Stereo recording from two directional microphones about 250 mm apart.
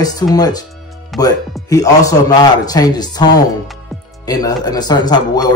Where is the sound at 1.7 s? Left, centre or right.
Centre.